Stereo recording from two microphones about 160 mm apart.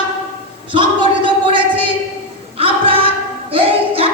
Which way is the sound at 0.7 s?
30° right (ahead or behind).